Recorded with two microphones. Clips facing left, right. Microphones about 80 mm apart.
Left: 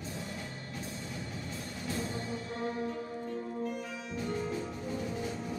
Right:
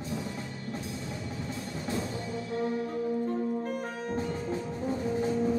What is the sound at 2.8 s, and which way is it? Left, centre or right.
Music, right.